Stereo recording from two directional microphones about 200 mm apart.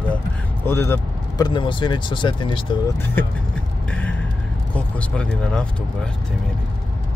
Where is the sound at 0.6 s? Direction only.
10° left (ahead or behind).